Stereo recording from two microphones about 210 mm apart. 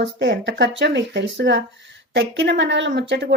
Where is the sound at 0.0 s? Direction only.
55° right (ahead or behind).